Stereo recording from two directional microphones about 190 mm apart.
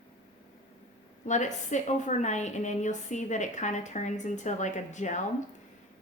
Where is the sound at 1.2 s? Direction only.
40° left (ahead or behind).